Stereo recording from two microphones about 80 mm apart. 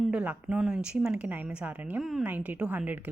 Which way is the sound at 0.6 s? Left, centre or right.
Centre.